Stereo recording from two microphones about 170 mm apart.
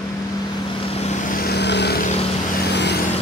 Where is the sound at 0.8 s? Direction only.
40° left (ahead or behind).